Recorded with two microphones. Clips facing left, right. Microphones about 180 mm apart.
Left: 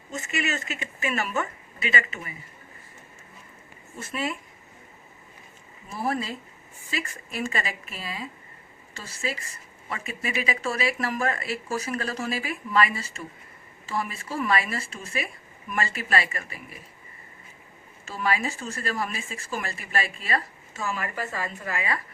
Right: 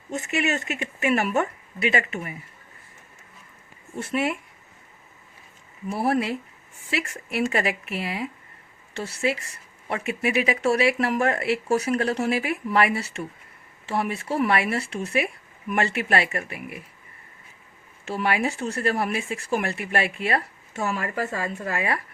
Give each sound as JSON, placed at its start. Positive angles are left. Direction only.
{"t": 0.1, "sound": "a woman's voice", "side_deg": -65}
{"t": 3.9, "sound": "a woman's voice", "side_deg": -70}
{"t": 5.9, "sound": "a woman's voice", "side_deg": -70}
{"t": 18.0, "sound": "a woman's voice", "side_deg": -65}